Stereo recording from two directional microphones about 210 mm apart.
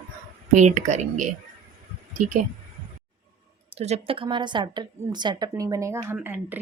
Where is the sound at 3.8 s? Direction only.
30° right (ahead or behind); by 6.6 s 10° right (ahead or behind).